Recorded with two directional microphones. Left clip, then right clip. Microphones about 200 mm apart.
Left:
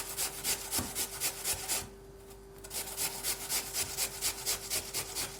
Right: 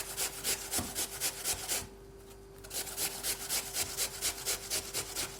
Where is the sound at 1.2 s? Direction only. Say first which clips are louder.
Even; 15° right (ahead or behind).